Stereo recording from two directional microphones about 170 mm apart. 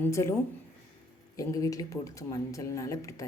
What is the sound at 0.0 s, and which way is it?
Speech, 15° left (ahead or behind).